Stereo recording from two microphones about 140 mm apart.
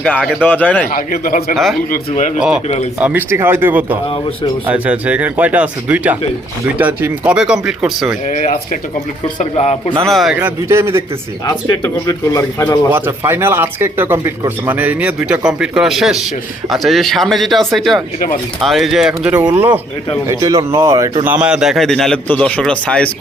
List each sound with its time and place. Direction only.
0.0 s speech: 5° left (ahead or behind)
0.9 s speech: 90° left
1.5 s speech: centre (ahead or behind)
1.9 s speech: 60° left (ahead or behind)
3.0 s speech: 15° right (ahead or behind)
8.3 s speech: 65° left (ahead or behind)
9.4 s a man's voice: 50° left (ahead or behind)
10.0 s speech: centre (ahead or behind)
10.4 s speech: 20° right (ahead or behind)
11.4 s speech: 25° left (ahead or behind)
12.9 s speech: 15° right (ahead or behind)
20.2 s speech: 25° right (ahead or behind)
21.2 s speech: 10° right (ahead or behind); by 23.1 s 5° left (ahead or behind)